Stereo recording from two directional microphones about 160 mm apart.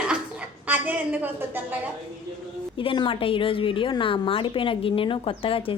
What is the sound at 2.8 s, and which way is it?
A woman's voice, 30° left (ahead or behind).